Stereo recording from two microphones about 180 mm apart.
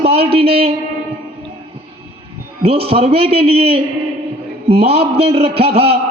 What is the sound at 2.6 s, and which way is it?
A man's voice, 35° right (ahead or behind).